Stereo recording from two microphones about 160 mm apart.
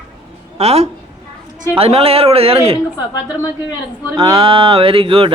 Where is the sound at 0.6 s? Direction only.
40° right (ahead or behind).